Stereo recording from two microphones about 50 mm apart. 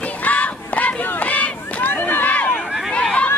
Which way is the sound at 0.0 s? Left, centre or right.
Left.